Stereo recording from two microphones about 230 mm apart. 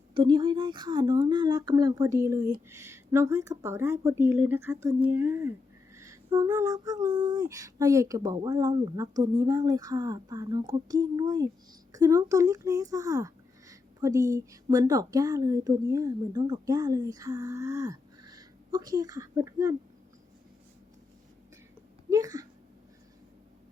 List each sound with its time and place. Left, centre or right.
0.1 s speech: centre
22.1 s speech: centre